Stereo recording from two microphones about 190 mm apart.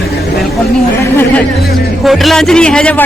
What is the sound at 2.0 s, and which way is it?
Speech, centre (ahead or behind).